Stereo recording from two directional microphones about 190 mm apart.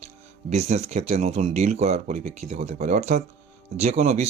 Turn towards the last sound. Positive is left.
turn(degrees=-35)  # may be behind; listen again after turning